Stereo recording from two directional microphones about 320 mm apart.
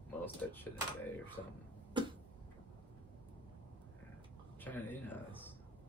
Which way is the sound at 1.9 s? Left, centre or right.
Centre.